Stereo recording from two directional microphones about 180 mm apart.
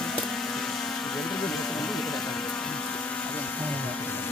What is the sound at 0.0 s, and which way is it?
Vehicle, 5° left (ahead or behind).